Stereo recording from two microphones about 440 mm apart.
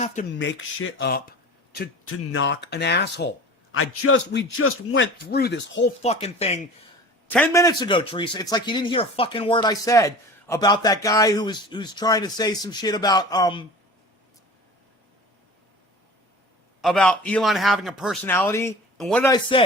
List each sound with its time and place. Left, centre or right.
0.0 s speech: centre
16.8 s a man's voice: centre